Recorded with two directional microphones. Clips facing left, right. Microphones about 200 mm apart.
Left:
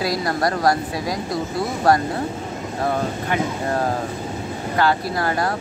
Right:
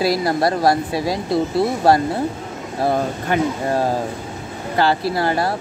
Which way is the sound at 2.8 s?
30° right (ahead or behind).